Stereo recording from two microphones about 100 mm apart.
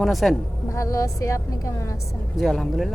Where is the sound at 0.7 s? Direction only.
35° left (ahead or behind).